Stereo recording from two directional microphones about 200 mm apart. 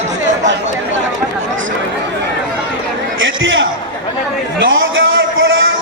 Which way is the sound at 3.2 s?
70° right (ahead or behind).